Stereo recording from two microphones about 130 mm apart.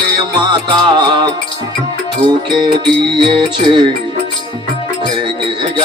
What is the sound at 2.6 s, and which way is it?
Music, 40° right (ahead or behind).